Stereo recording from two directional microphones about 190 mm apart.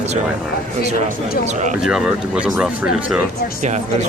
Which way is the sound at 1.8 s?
Centre (ahead or behind).